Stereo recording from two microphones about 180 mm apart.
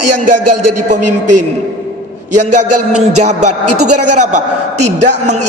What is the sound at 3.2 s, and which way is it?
A woman's voice, 40° right (ahead or behind).